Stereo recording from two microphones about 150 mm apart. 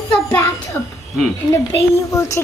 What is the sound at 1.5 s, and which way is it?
Speech, 20° left (ahead or behind).